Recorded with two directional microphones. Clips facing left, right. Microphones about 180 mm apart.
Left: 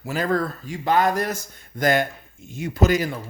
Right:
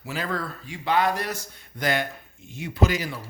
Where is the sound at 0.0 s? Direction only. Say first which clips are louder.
Left 7 dB; 45° left (ahead or behind).